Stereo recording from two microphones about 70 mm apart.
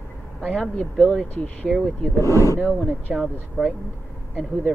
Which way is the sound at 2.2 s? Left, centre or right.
Left.